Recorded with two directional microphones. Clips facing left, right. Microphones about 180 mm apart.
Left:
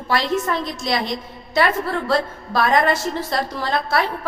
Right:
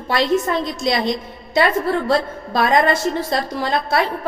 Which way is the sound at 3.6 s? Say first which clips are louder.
Right 2 dB; 20° right (ahead or behind).